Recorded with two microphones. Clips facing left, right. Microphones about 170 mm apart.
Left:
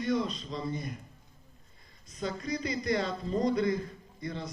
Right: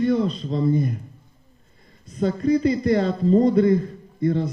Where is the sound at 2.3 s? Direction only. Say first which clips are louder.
Right 14 dB; 40° right (ahead or behind).